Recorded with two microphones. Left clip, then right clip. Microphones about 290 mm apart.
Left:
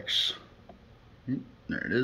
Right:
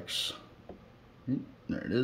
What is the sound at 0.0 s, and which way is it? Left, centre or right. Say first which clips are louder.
Speech: left 7 dB; centre.